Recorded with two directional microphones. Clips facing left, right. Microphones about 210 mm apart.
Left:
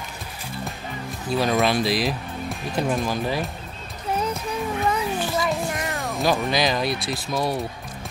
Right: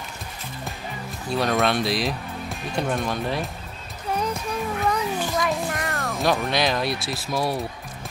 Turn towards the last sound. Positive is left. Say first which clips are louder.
# left 1 dB
turn(degrees=0)  # may be behind; listen again after turning